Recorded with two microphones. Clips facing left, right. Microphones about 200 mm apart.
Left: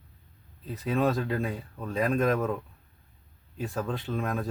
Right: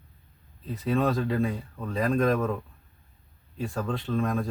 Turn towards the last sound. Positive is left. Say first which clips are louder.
# right 3 dB
turn(degrees=5)  # may be behind; listen again after turning